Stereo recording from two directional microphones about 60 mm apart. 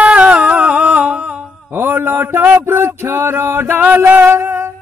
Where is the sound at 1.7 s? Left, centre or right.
Right.